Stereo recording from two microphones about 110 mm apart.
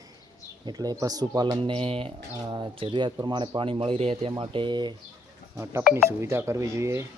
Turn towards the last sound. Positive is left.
turn(degrees=-25)  # may be behind; listen again after turning